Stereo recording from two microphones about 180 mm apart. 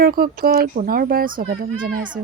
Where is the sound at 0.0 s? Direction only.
55° right (ahead or behind).